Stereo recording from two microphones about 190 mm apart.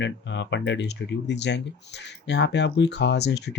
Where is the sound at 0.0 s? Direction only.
70° left (ahead or behind).